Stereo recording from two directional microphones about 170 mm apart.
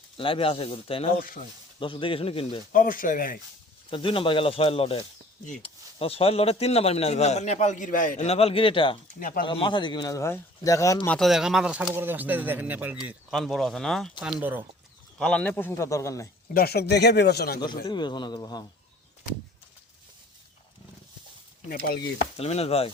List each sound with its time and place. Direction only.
0.2 s a man's voice: 30° left (ahead or behind)
2.7 s speech: 50° left (ahead or behind)
3.8 s a man's voice: 30° left (ahead or behind)
11.1 s speech: centre (ahead or behind)
15.2 s a man's voice: 5° left (ahead or behind)
16.6 s speech: 70° left (ahead or behind)
17.8 s speech: 25° left (ahead or behind)
22.4 s a man's voice: 35° left (ahead or behind)